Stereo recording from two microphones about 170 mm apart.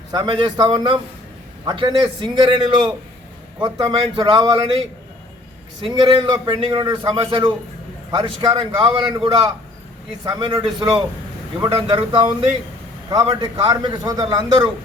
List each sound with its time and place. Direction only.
0.1 s a man's voice: 30° right (ahead or behind)